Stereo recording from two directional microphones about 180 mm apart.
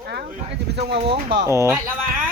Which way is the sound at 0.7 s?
70° right (ahead or behind).